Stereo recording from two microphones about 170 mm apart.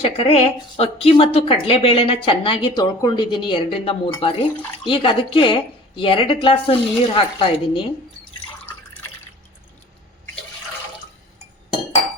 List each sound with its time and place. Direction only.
0.0 s speech: 35° left (ahead or behind)